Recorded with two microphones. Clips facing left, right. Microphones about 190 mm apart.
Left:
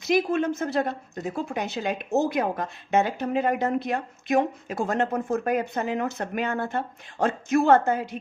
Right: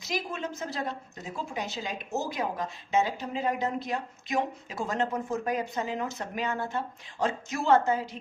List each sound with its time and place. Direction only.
0.0 s a woman's voice: 60° left (ahead or behind)